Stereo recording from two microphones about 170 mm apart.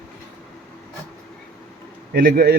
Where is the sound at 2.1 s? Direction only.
60° right (ahead or behind).